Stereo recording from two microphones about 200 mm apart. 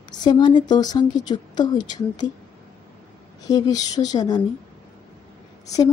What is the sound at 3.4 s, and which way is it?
Speech, 20° left (ahead or behind).